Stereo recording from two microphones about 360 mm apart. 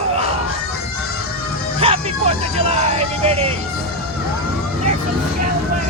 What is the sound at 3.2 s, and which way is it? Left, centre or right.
Vehicle, centre.